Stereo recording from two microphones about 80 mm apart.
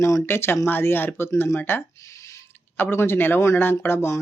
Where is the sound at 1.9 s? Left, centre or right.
Left.